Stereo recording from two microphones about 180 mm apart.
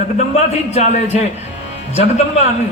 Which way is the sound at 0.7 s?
40° left (ahead or behind).